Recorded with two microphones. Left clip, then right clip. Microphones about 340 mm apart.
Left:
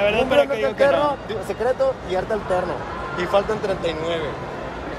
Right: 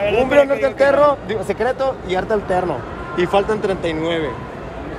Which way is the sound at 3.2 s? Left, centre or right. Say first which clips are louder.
Right 4 dB; centre.